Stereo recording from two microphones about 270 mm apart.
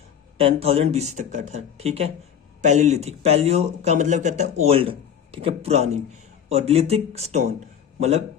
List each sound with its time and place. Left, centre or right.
0.3 s a man's voice: right